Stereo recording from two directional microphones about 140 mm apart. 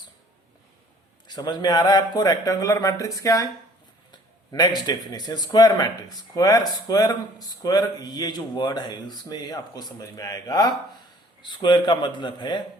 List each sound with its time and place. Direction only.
1.3 s a man's voice: 30° left (ahead or behind)